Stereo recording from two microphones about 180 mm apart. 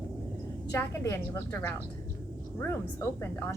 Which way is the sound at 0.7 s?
15° left (ahead or behind).